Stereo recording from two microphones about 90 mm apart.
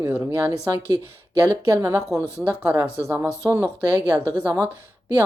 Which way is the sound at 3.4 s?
35° right (ahead or behind).